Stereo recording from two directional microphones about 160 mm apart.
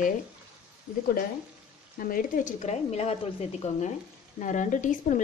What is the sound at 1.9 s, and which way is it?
Speech, 60° left (ahead or behind).